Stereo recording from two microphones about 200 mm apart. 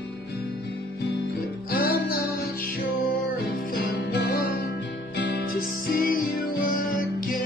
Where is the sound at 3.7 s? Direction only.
50° left (ahead or behind).